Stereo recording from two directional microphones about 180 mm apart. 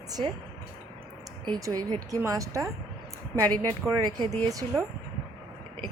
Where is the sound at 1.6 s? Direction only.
20° right (ahead or behind).